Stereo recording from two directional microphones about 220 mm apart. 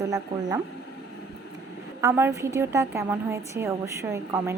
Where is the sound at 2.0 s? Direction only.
10° right (ahead or behind).